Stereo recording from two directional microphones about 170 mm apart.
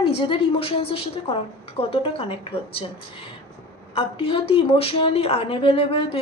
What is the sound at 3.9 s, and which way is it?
Speech, 30° left (ahead or behind).